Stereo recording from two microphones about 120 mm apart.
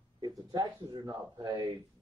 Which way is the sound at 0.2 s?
35° right (ahead or behind).